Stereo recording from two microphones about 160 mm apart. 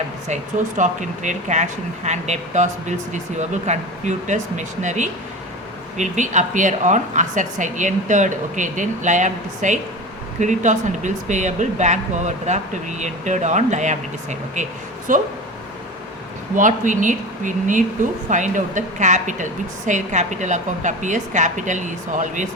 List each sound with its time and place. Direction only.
0.8 s speech: 50° right (ahead or behind)
16.6 s speech: 55° right (ahead or behind)